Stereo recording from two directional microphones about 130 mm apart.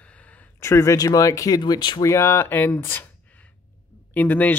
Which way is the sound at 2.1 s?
20° left (ahead or behind).